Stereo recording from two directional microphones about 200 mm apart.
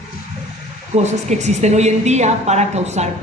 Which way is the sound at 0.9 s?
35° right (ahead or behind).